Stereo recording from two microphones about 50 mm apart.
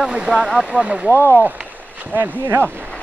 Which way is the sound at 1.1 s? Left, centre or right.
Left.